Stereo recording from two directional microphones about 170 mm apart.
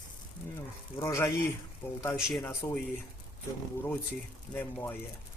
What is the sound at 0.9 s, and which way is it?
Speech, 15° left (ahead or behind).